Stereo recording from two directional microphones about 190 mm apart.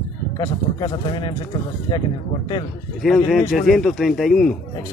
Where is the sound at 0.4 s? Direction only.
25° left (ahead or behind).